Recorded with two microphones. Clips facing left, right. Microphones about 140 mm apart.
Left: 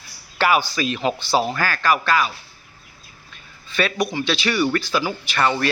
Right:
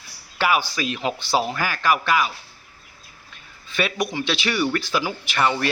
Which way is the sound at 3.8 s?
10° right (ahead or behind).